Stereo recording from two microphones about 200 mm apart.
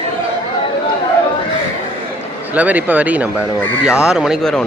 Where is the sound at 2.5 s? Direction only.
5° right (ahead or behind).